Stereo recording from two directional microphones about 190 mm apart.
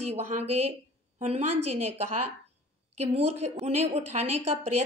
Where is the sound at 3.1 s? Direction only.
35° right (ahead or behind).